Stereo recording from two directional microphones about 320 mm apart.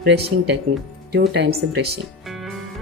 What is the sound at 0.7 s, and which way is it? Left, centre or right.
Music, right.